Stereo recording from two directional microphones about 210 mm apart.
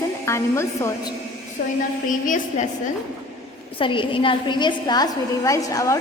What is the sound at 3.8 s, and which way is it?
A woman's voice, 25° left (ahead or behind).